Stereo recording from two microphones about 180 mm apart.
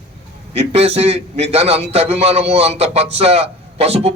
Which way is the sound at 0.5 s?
35° right (ahead or behind).